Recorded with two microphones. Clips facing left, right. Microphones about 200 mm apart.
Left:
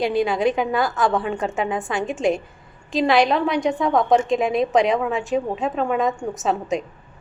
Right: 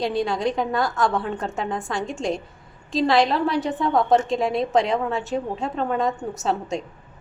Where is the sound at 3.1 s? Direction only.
Centre (ahead or behind).